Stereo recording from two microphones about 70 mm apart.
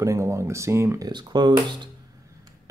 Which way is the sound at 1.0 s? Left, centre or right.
Right.